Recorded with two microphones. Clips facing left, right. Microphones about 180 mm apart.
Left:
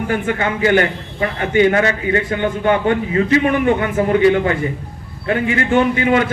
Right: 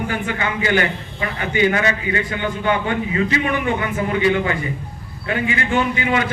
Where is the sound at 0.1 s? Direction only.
50° left (ahead or behind).